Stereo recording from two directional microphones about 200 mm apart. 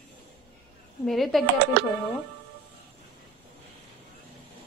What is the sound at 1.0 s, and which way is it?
Speech, centre (ahead or behind).